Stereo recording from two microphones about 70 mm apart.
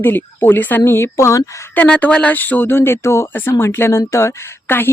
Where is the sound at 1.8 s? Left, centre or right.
Left.